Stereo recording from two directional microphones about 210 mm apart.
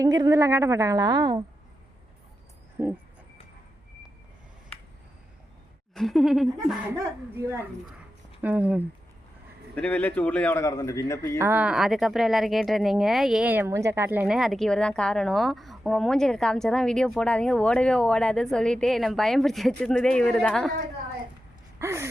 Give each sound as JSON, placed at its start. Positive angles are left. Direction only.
{"t": 0.0, "sound": "a woman's voice", "side_deg": -15}
{"t": 2.8, "sound": "a woman's voice", "side_deg": -10}
{"t": 5.9, "sound": "speech", "side_deg": 0}
{"t": 9.7, "sound": "a man's voice", "side_deg": 10}
{"t": 11.3, "sound": "speech", "side_deg": -10}
{"t": 21.8, "sound": "a sound", "side_deg": -10}